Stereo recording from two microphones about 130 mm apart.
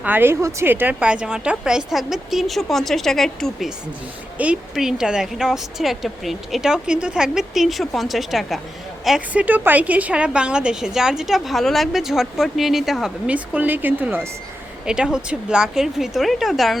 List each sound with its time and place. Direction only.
0.0 s a woman's voice: 15° right (ahead or behind)